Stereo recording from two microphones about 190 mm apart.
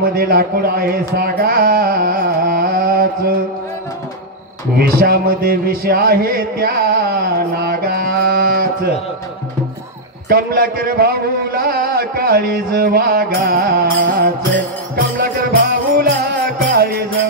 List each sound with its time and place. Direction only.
0.0 s a sound: 50° right (ahead or behind)
4.7 s music: 55° right (ahead or behind)
10.3 s speech: 50° right (ahead or behind)